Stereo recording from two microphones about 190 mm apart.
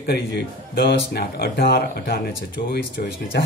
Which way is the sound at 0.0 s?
55° left (ahead or behind).